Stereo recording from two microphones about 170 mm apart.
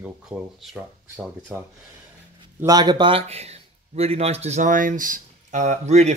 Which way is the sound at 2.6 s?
20° right (ahead or behind).